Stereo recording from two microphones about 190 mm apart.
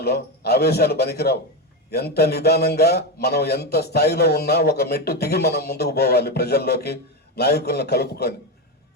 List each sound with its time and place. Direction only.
0.0 s a man's voice: 55° left (ahead or behind)